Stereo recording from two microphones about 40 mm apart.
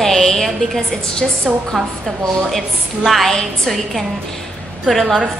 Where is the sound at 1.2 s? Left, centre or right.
Centre.